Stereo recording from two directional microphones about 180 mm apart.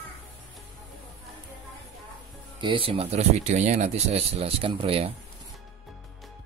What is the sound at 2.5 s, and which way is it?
Speech, 30° right (ahead or behind).